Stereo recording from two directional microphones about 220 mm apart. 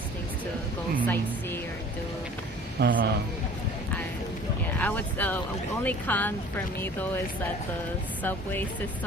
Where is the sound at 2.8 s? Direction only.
50° right (ahead or behind).